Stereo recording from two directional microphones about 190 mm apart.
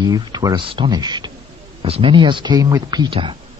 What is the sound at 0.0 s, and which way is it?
A man's voice, 20° right (ahead or behind).